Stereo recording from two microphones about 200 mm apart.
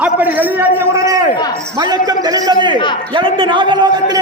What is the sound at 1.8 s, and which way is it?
A man's voice, 20° right (ahead or behind).